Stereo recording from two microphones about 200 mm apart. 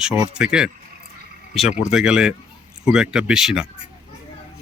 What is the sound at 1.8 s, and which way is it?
Speech, 5° right (ahead or behind).